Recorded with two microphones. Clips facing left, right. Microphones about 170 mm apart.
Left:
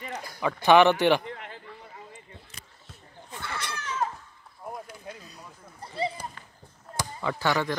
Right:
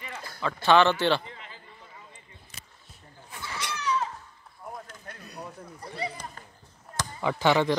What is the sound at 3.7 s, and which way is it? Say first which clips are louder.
Cat: right 3 dB; 50° left (ahead or behind).